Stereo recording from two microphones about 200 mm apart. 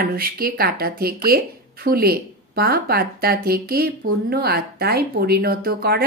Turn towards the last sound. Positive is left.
turn(degrees=-50)  # may be behind; listen again after turning